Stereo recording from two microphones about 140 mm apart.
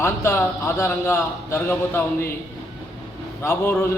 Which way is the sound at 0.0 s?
20° left (ahead or behind).